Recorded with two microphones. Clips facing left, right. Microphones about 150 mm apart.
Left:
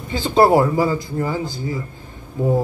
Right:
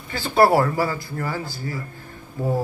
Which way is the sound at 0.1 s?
20° left (ahead or behind).